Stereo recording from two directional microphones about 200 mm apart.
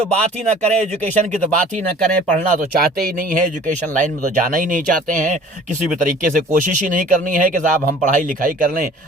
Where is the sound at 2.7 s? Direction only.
50° right (ahead or behind).